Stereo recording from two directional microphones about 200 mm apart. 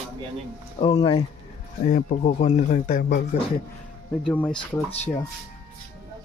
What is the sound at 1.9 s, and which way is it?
Speech, 40° left (ahead or behind).